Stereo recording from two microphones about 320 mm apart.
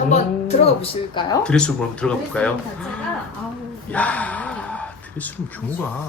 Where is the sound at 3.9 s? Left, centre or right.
Centre.